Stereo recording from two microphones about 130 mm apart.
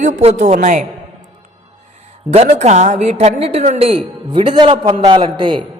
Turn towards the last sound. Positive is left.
turn(degrees=-40)  # may be behind; listen again after turning